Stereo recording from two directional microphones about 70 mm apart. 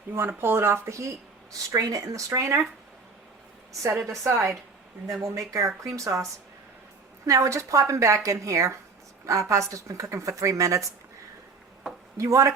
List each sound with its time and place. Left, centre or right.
0.1 s speech: right
4.1 s speech: right
7.3 s speech: right
12.1 s speech: right